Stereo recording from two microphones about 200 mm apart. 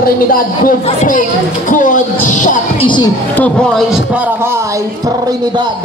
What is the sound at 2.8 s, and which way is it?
Speech, 25° left (ahead or behind).